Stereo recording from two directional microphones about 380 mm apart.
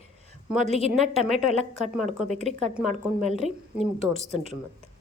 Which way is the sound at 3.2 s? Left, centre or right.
Centre.